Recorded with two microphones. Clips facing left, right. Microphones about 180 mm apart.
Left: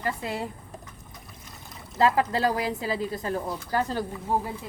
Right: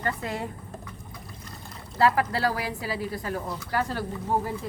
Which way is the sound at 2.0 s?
20° left (ahead or behind).